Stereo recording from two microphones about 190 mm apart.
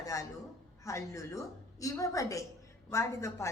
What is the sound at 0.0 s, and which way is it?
A man's voice, 20° left (ahead or behind).